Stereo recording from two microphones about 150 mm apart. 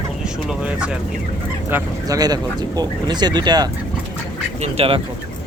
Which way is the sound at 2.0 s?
25° right (ahead or behind).